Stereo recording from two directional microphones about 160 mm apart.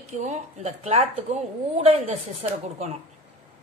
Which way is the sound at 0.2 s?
45° right (ahead or behind).